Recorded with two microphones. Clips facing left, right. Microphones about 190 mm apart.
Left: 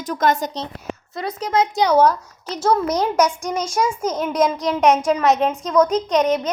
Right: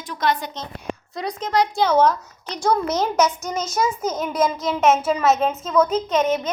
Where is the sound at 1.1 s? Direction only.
5° left (ahead or behind).